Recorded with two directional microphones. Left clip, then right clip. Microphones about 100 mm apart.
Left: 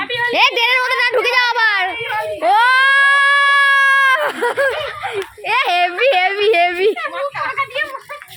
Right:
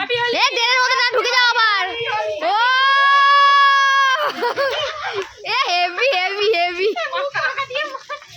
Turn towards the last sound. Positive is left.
turn(degrees=-10)  # may be behind; listen again after turning